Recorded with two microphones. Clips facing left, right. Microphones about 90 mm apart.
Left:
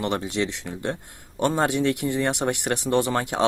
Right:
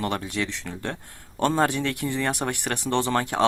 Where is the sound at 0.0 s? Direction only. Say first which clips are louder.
Left 2 dB; 20° left (ahead or behind).